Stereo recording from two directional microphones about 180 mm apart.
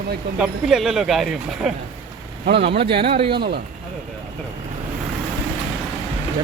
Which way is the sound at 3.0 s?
30° right (ahead or behind).